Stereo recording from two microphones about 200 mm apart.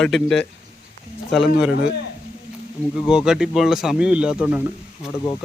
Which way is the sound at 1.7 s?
55° left (ahead or behind).